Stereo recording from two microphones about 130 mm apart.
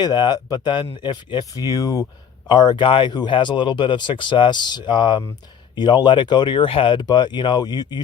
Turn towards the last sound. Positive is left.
turn(degrees=30)  # may be behind; listen again after turning